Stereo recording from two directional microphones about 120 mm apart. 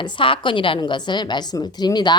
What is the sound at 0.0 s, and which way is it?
A woman's voice, 45° left (ahead or behind).